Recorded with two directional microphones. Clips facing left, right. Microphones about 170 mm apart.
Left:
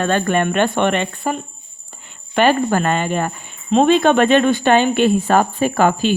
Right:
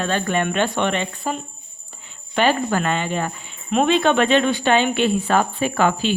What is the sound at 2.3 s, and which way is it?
Speech, 50° left (ahead or behind).